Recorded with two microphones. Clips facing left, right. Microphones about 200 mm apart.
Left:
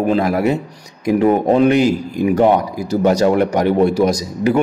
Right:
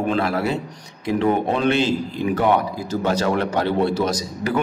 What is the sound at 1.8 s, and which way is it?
A man's voice, 15° left (ahead or behind).